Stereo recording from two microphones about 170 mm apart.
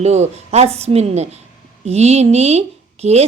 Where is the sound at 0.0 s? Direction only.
40° right (ahead or behind).